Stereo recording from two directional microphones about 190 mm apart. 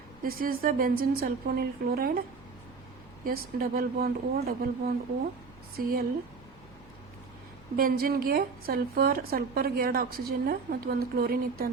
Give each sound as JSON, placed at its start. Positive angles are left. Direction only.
{"t": 0.2, "sound": "a woman's voice", "side_deg": -50}
{"t": 3.2, "sound": "a woman's voice", "side_deg": -50}
{"t": 7.8, "sound": "a woman's voice", "side_deg": -50}